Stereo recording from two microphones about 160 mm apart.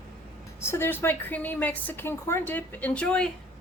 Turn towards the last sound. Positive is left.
turn(degrees=5)  # may be behind; listen again after turning